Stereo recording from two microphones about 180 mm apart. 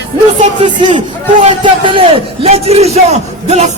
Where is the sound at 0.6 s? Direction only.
25° right (ahead or behind).